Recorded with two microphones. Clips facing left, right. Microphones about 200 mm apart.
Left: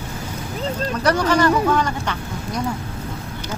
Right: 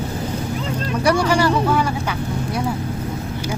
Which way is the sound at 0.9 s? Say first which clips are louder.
Right 2 dB; 10° right (ahead or behind).